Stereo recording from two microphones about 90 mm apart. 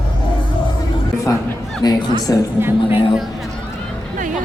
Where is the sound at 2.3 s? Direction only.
35° left (ahead or behind).